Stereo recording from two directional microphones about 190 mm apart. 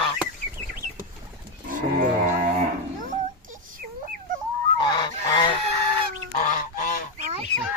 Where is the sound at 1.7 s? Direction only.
45° right (ahead or behind).